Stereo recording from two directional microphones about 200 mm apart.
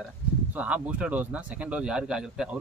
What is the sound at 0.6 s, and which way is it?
Speech, 5° right (ahead or behind).